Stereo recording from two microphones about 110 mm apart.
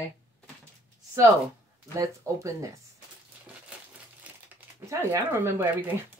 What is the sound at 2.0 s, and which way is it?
Speech, 30° right (ahead or behind).